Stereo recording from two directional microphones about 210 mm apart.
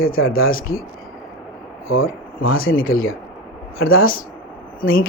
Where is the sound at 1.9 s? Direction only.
75° left (ahead or behind).